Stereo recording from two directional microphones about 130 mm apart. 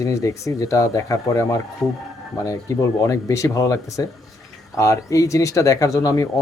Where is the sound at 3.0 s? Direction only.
25° left (ahead or behind).